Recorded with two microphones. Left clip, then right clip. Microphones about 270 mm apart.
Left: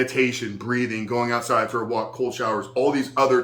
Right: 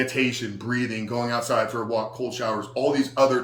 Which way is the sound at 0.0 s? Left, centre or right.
Centre.